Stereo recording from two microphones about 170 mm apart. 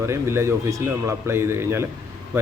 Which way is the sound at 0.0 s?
15° right (ahead or behind).